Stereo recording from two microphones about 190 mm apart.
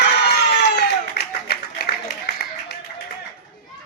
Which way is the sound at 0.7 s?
60° left (ahead or behind).